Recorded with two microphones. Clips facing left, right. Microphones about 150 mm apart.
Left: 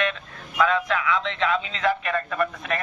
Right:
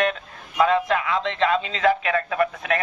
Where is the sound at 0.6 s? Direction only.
30° right (ahead or behind).